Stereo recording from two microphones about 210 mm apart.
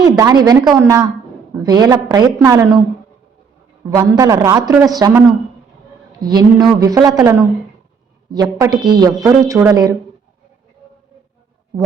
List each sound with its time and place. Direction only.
0.0 s a woman's voice: 20° right (ahead or behind)
3.8 s a woman's voice: 15° right (ahead or behind)